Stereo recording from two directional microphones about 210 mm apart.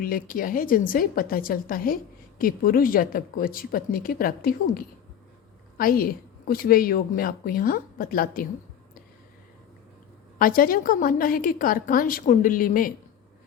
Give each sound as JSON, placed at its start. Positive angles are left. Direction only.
{"t": 0.0, "sound": "a woman's voice", "side_deg": 45}
{"t": 10.3, "sound": "a woman's voice", "side_deg": 40}